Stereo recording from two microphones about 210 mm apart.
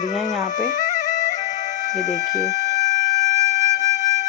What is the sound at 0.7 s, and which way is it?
Music, 35° left (ahead or behind).